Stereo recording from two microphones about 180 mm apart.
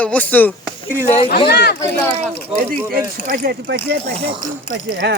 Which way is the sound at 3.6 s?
65° right (ahead or behind).